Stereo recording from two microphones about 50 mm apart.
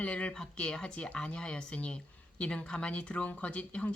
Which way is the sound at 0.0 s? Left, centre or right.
Left.